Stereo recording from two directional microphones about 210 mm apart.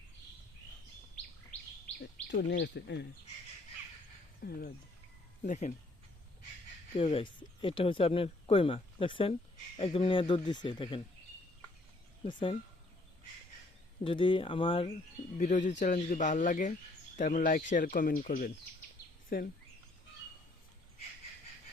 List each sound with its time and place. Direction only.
2.2 s speech: 55° left (ahead or behind)
4.4 s speech: 55° left (ahead or behind)
5.4 s speech: 35° left (ahead or behind)
6.9 s speech: 25° left (ahead or behind)
12.2 s speech: 25° left (ahead or behind)
14.0 s speech: 25° left (ahead or behind)
15.4 s speech: 35° left (ahead or behind)